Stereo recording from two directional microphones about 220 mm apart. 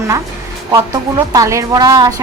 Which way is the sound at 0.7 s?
15° right (ahead or behind).